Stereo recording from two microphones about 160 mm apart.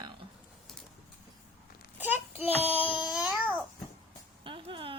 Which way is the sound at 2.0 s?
10° right (ahead or behind).